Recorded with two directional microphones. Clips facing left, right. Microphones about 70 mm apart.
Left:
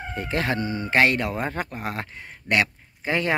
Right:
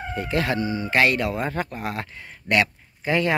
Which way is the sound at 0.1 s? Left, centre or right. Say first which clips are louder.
Right 2 dB; left.